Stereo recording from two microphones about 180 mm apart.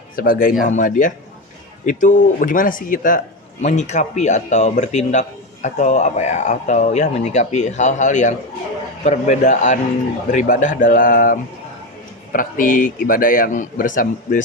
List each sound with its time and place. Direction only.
0.2 s a man's voice: 50° left (ahead or behind)